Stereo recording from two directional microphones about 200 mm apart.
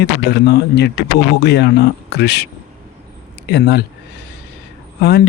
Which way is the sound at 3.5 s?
55° left (ahead or behind).